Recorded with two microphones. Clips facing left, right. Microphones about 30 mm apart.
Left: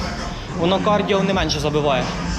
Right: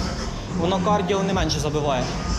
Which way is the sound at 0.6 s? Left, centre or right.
Left.